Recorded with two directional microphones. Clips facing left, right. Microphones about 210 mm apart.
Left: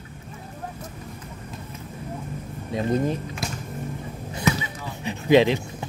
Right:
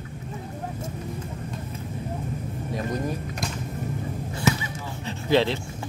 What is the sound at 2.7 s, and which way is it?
Speech, 25° left (ahead or behind).